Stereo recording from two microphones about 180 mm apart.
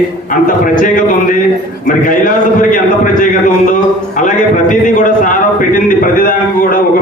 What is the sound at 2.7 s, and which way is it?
A man's voice, 45° left (ahead or behind).